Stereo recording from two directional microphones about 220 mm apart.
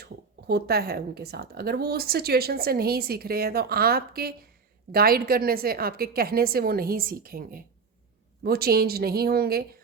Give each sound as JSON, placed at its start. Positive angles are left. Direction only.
{"t": 0.0, "sound": "speech", "side_deg": -45}